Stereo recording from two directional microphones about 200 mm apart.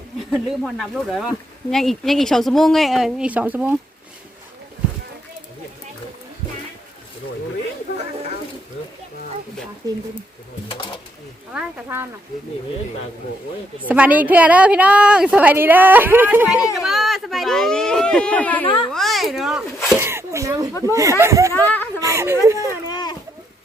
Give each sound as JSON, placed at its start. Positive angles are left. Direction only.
{"t": 0.3, "sound": "speech", "side_deg": 0}
{"t": 11.5, "sound": "a woman's voice", "side_deg": -10}
{"t": 13.8, "sound": "a woman's voice", "side_deg": -5}
{"t": 18.6, "sound": "a child's voice", "side_deg": 25}
{"t": 18.9, "sound": "a woman's voice", "side_deg": 0}
{"t": 22.9, "sound": "a sound", "side_deg": 20}